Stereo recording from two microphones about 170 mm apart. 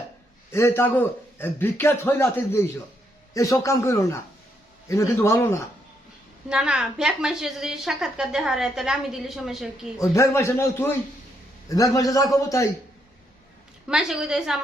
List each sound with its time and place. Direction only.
0.5 s a man's voice: 15° left (ahead or behind)
6.5 s a woman's voice: 5° right (ahead or behind)
10.0 s a man's voice: 15° left (ahead or behind)
13.8 s a woman's voice: 5° right (ahead or behind)